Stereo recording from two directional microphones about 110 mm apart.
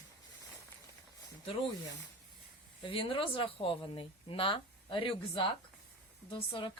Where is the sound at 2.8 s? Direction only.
55° left (ahead or behind).